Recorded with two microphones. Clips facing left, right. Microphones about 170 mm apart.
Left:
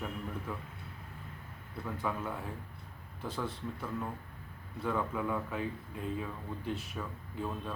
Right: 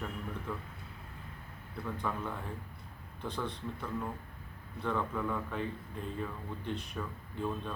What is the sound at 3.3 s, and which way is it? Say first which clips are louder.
Speech: even; 5° left (ahead or behind).